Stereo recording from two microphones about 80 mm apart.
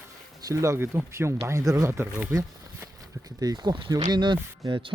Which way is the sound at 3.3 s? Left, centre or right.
Right.